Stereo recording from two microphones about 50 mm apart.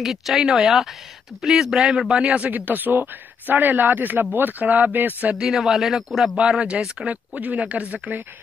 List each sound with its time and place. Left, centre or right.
0.0 s a man's voice: centre; by 2.5 s right
2.5 s a man's voice: right
5.5 s speech: centre
6.6 s a man's voice: centre
7.1 s a man's voice: right